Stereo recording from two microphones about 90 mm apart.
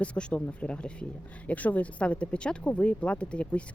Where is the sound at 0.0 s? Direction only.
10° left (ahead or behind).